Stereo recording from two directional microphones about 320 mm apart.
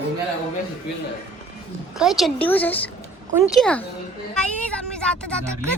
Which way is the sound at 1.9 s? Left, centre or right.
Centre.